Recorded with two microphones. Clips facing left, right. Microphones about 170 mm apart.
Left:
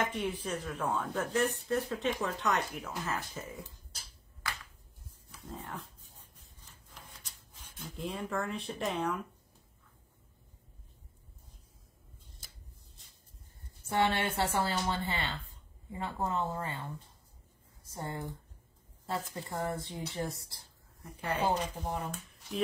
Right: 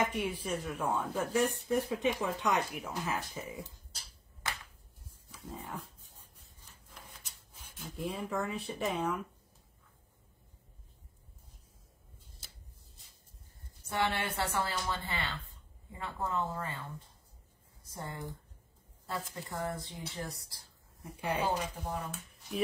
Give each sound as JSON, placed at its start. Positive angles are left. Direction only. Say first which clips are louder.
{"t": 0.0, "sound": "speech", "louder": "right 1 dB", "side_deg": -10}
{"t": 5.3, "sound": "speech", "louder": "even", "side_deg": -10}
{"t": 6.7, "sound": "a sound", "louder": "even", "side_deg": -10}
{"t": 13.8, "sound": "speech", "louder": "left 3 dB", "side_deg": 25}
{"t": 17.9, "sound": "speech", "louder": "left 3 dB", "side_deg": 25}
{"t": 21.2, "sound": "speech", "louder": "left 1 dB", "side_deg": -10}